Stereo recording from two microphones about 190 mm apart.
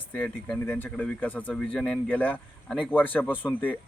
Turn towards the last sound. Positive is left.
turn(degrees=10)  # may be behind; listen again after turning